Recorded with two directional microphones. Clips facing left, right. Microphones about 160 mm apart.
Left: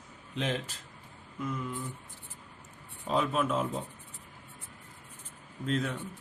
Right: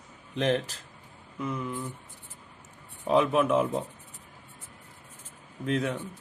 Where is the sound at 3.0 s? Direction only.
70° right (ahead or behind).